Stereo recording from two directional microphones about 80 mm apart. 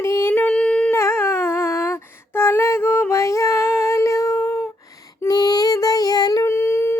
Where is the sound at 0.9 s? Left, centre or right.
Left.